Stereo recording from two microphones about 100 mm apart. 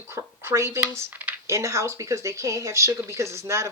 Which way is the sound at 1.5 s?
30° right (ahead or behind).